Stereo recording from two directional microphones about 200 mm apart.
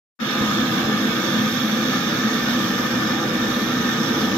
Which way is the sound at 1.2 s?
5° left (ahead or behind).